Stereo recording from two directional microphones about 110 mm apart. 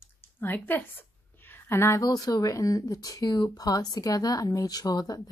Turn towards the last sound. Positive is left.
turn(degrees=35)  # may be behind; listen again after turning